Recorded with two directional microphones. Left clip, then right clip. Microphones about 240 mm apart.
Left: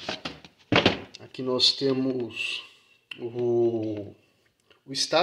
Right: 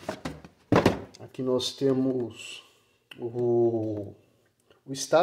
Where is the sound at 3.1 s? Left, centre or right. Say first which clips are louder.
Even; left.